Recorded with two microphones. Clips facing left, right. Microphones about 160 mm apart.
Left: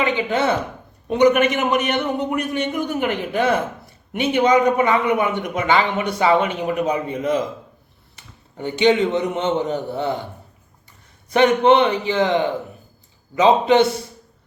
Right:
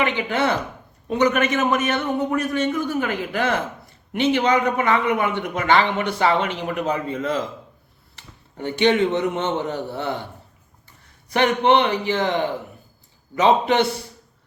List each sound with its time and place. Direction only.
0.0 s a man's voice: 20° left (ahead or behind)
8.5 s a man's voice: 15° left (ahead or behind)
11.3 s a man's voice: 20° left (ahead or behind)
13.4 s a man's voice: 20° left (ahead or behind)